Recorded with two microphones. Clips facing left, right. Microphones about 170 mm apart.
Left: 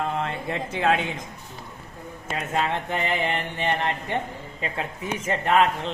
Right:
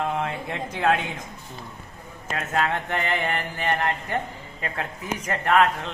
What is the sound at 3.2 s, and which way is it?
Speech, 25° left (ahead or behind).